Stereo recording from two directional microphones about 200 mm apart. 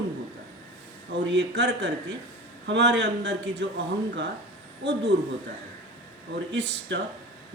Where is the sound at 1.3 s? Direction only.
60° right (ahead or behind).